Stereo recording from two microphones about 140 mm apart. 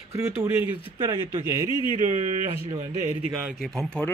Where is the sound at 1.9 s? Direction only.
60° right (ahead or behind).